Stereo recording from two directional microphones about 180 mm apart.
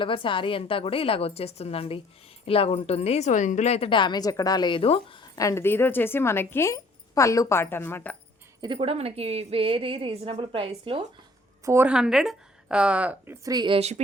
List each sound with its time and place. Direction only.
0.0 s speech: 30° left (ahead or behind)
5.4 s a woman's voice: 15° left (ahead or behind)
8.6 s a woman's voice: 30° right (ahead or behind)
11.6 s speech: 10° right (ahead or behind); by 13.9 s 30° right (ahead or behind)